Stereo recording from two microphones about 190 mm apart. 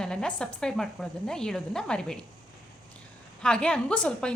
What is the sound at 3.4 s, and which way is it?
Speech, 5° left (ahead or behind).